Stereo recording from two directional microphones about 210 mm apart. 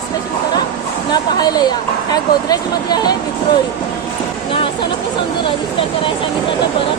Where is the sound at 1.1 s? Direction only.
20° left (ahead or behind).